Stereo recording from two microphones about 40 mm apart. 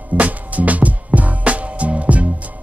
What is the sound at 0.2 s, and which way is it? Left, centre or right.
Music, right.